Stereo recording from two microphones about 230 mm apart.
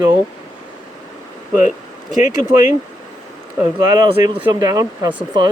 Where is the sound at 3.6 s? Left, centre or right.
Centre.